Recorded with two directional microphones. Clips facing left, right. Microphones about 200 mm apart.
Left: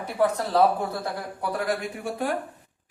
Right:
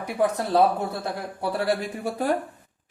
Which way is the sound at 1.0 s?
30° right (ahead or behind).